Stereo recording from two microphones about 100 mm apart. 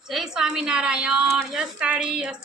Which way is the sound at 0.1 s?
5° right (ahead or behind).